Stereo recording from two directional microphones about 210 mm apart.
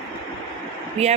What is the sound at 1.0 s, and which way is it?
Speech, 30° right (ahead or behind).